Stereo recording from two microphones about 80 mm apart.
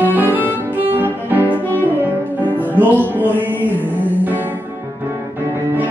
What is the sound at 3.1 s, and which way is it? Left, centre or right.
Music, right.